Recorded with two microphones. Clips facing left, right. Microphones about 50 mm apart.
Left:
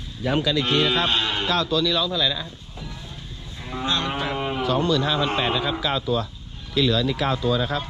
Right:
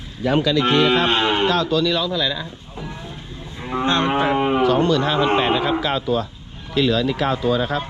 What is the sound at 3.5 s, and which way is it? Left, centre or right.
Cattle, right.